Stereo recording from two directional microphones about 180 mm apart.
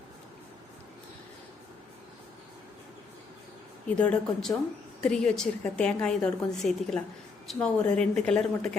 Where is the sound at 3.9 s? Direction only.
5° left (ahead or behind).